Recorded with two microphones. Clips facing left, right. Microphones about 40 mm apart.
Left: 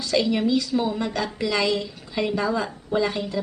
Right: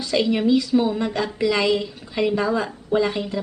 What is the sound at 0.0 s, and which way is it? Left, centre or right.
A woman's voice, right.